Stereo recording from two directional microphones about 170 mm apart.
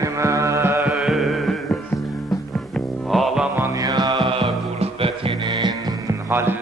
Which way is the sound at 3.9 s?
25° right (ahead or behind).